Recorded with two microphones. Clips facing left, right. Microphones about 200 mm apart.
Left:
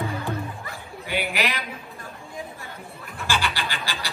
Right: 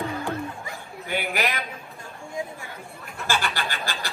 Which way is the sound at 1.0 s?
50° right (ahead or behind).